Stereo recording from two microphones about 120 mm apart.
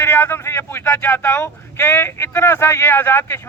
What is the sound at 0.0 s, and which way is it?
A man's voice, 20° left (ahead or behind).